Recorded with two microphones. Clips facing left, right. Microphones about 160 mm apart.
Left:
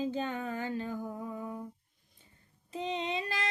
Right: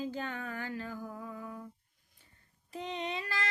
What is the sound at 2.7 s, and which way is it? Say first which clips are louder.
Child singing: left 3 dB; 20° left (ahead or behind).